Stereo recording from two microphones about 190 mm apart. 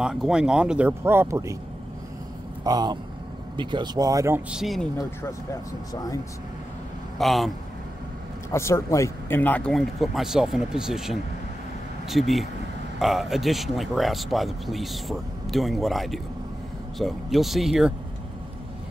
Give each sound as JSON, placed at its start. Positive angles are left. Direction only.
{"t": 0.0, "sound": "speech", "side_deg": -5}
{"t": 2.6, "sound": "speech", "side_deg": -20}
{"t": 4.5, "sound": "speech", "side_deg": 0}
{"t": 4.9, "sound": "speech", "side_deg": 15}
{"t": 7.2, "sound": "speech", "side_deg": 0}
{"t": 8.5, "sound": "speech", "side_deg": 15}